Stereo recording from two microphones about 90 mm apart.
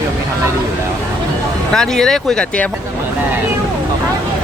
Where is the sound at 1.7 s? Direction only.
5° left (ahead or behind).